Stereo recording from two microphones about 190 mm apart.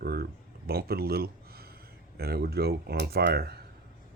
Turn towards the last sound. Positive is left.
turn(degrees=-55)  # may be behind; listen again after turning